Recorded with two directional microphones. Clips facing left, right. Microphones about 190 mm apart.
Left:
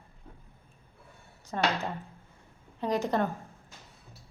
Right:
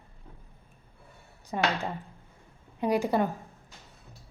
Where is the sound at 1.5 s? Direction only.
10° right (ahead or behind).